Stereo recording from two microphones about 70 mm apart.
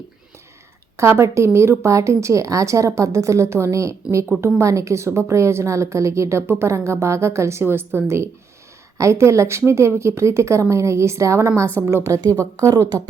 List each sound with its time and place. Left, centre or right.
0.9 s a woman's voice: right
12.7 s speech: right